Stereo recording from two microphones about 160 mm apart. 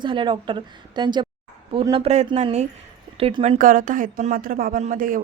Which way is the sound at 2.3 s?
45° right (ahead or behind).